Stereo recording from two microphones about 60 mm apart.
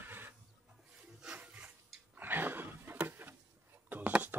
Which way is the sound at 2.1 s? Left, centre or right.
Right.